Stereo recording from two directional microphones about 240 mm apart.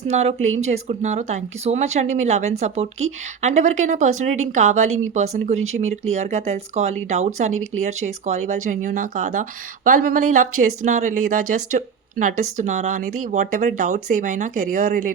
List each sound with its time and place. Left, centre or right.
0.1 s speech: right
5.5 s speech: right
5.8 s speech: right